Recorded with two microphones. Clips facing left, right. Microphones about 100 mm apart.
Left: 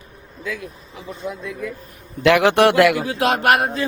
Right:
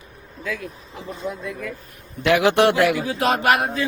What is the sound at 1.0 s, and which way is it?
Speech, centre (ahead or behind).